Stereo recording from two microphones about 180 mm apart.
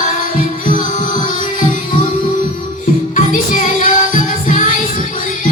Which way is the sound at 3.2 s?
45° left (ahead or behind).